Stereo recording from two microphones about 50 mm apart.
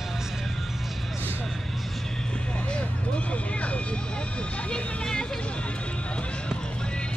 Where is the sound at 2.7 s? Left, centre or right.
Left.